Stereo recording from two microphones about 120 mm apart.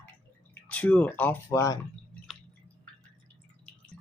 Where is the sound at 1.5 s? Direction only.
25° left (ahead or behind).